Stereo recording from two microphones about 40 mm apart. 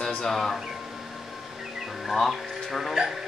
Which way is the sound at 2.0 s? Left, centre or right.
Centre.